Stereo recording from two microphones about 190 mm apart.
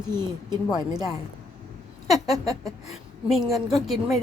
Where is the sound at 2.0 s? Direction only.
Centre (ahead or behind).